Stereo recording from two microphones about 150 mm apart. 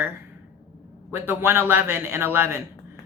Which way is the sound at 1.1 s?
15° right (ahead or behind).